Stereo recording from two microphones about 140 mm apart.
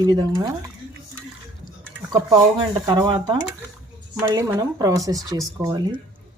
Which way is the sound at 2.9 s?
30° right (ahead or behind).